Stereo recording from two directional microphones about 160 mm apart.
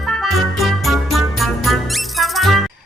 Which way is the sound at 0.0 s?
Centre (ahead or behind).